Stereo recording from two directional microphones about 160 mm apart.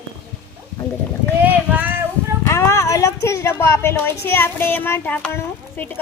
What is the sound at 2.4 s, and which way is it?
A woman's voice, 15° left (ahead or behind).